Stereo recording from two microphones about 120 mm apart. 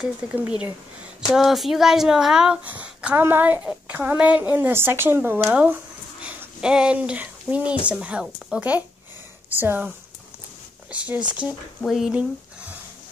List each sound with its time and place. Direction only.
0.2 s speech: 10° right (ahead or behind)
10.9 s speech: 10° right (ahead or behind)